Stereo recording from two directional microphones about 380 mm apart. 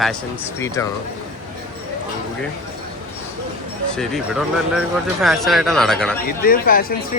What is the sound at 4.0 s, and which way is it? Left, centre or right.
Speech, centre.